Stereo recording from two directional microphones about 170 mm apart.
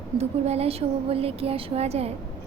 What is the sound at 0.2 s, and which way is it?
A woman's voice, 40° right (ahead or behind).